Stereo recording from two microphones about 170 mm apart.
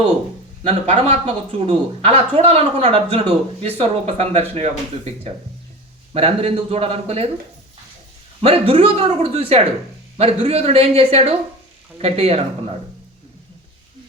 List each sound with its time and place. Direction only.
0.9 s a man's voice: 35° right (ahead or behind)
6.1 s a man's voice: 35° right (ahead or behind)
8.4 s a man's voice: 35° right (ahead or behind)